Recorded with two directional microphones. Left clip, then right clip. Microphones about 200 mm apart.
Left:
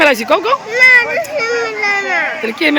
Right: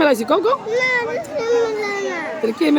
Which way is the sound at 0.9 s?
15° right (ahead or behind).